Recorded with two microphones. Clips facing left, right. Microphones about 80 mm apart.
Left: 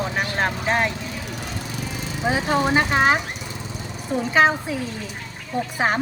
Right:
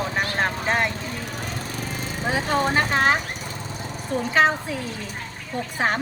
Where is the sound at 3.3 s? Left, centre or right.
Right.